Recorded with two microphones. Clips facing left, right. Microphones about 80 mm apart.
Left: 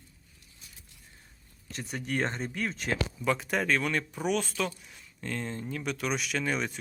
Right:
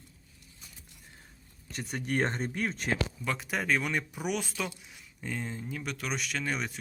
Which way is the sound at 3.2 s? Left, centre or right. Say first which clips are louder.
Left 4 dB; centre.